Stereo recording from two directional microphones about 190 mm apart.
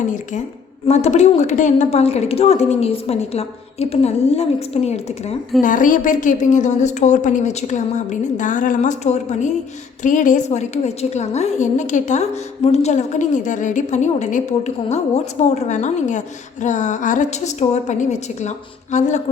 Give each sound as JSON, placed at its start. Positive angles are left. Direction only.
{"t": 0.9, "sound": "a woman's voice", "side_deg": 35}